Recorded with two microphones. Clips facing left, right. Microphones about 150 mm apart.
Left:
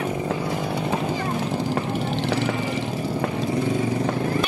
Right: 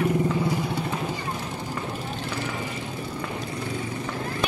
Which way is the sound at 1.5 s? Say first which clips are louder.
Left 7 dB; 75° left (ahead or behind).